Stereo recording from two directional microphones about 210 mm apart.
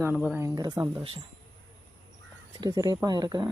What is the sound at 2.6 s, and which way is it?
Speech, 15° right (ahead or behind).